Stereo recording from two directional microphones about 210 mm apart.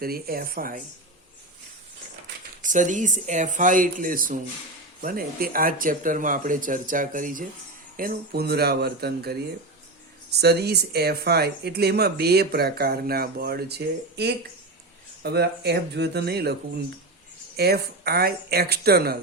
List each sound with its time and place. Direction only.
0.0 s speech: 45° right (ahead or behind)
2.6 s speech: 40° right (ahead or behind)
10.4 s speech: 50° right (ahead or behind)